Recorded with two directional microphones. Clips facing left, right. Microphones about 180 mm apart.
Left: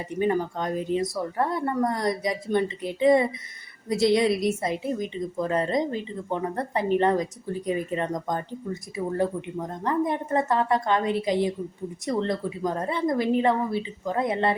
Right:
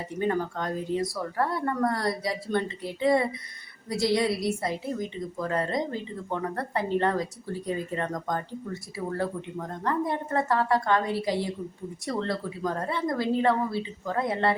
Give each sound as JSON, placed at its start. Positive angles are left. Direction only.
{"t": 0.0, "sound": "a woman's voice", "side_deg": 15}